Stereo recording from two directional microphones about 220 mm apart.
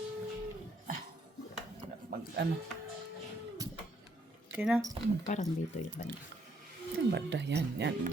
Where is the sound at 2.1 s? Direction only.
45° right (ahead or behind).